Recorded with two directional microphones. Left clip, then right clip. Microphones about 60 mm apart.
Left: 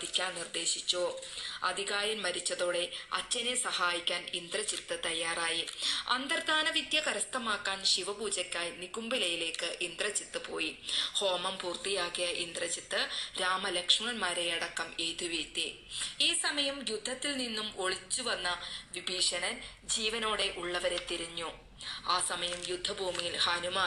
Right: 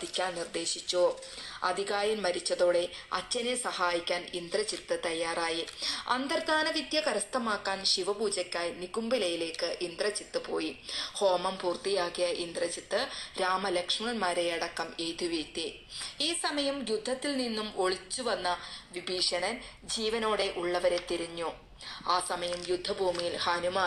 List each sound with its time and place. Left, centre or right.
0.1 s speech: right